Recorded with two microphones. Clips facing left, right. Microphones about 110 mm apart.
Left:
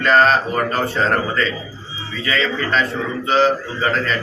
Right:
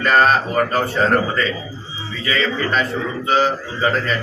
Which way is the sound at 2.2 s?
5° right (ahead or behind).